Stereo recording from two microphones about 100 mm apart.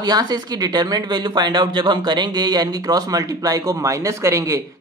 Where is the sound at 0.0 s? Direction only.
40° right (ahead or behind).